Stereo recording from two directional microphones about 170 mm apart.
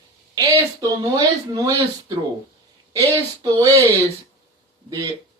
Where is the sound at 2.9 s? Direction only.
25° right (ahead or behind).